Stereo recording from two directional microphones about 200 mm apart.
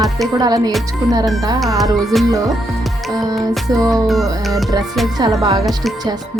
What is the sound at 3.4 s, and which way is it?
Music, 20° right (ahead or behind).